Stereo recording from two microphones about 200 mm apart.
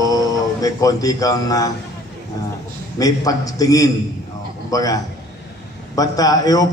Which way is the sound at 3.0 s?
20° left (ahead or behind).